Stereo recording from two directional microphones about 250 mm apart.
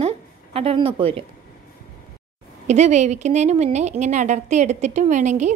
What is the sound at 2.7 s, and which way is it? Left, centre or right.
A woman's voice, right.